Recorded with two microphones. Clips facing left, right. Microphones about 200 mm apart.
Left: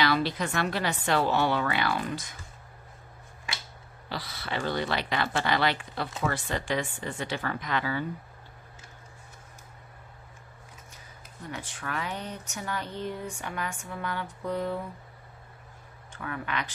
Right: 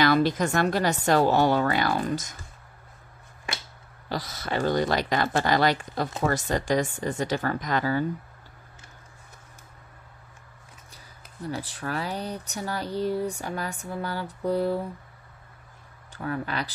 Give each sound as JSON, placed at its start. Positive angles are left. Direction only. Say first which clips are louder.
{"t": 0.0, "sound": "a woman's voice", "louder": "right 5 dB", "side_deg": -45}
{"t": 4.1, "sound": "speech", "louder": "right 5 dB", "side_deg": -45}
{"t": 11.4, "sound": "speech", "louder": "right 6 dB", "side_deg": -35}
{"t": 16.1, "sound": "speech", "louder": "right 4 dB", "side_deg": -35}